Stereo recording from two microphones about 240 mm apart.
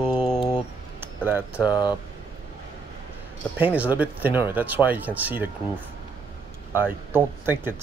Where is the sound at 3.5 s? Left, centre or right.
Centre.